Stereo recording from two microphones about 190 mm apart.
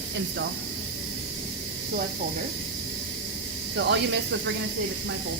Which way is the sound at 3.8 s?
65° right (ahead or behind).